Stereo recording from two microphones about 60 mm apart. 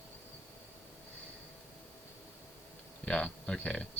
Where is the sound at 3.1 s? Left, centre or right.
Left.